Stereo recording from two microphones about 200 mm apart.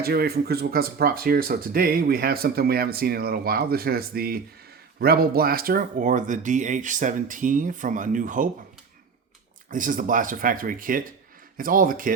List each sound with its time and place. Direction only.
0.0 s speech: 50° right (ahead or behind)
9.6 s speech: 40° right (ahead or behind)